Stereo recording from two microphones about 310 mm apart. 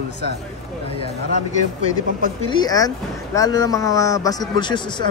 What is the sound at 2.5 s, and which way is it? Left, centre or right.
Speech, centre.